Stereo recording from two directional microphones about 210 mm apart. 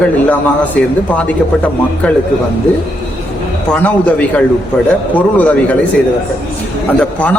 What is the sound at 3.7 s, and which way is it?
A man's voice, 5° left (ahead or behind).